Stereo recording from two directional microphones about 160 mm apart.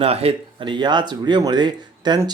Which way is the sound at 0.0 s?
40° right (ahead or behind).